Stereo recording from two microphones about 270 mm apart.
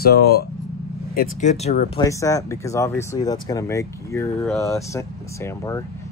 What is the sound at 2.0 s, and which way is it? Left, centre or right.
Speech, centre.